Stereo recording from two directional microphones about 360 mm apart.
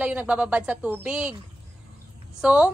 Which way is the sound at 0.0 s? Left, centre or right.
Centre.